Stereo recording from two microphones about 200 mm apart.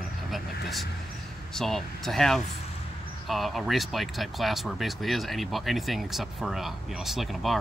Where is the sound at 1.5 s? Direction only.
Centre (ahead or behind).